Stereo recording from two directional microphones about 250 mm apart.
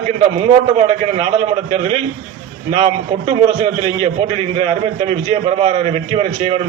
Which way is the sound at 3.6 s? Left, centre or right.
Right.